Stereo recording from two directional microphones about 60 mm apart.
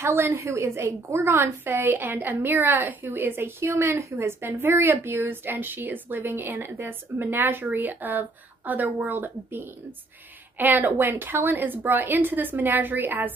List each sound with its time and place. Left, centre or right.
0.0 s a woman's voice: right
10.6 s a woman's voice: right